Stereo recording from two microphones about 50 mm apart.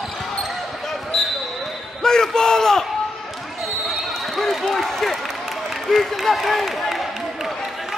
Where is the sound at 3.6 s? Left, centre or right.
Centre.